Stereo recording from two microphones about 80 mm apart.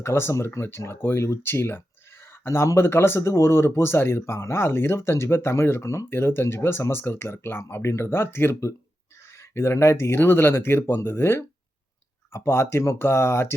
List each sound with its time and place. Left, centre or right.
0.0 s speech: left